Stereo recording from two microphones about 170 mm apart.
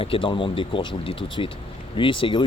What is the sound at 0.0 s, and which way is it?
Speech, 30° left (ahead or behind).